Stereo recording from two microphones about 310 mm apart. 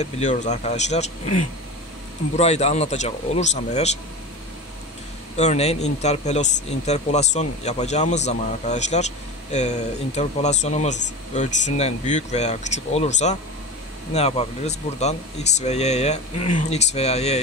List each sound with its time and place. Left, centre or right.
0.0 s speech: left
5.4 s speech: left